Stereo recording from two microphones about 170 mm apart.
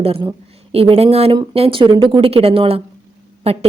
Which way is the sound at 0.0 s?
35° right (ahead or behind).